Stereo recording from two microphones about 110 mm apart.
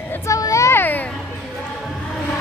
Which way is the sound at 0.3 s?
30° left (ahead or behind).